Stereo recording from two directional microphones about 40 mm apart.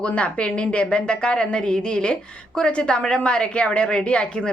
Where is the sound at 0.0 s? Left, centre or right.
Left.